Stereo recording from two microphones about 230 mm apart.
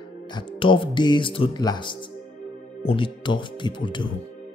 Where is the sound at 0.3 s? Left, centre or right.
Left.